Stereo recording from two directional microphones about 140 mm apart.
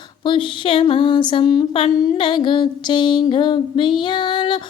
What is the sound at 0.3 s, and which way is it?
Female singing, 40° left (ahead or behind).